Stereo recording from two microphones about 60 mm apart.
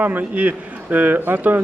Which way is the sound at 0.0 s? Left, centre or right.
Right.